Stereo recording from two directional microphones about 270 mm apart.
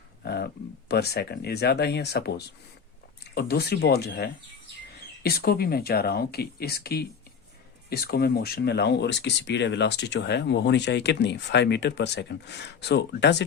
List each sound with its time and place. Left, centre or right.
0.2 s speech: left
3.3 s speech: left